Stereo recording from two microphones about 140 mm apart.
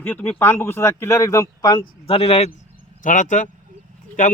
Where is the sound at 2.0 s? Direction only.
45° left (ahead or behind).